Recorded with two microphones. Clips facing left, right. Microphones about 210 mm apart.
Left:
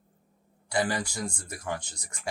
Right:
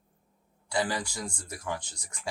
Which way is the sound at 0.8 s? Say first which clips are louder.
Left 2 dB; 50° left (ahead or behind).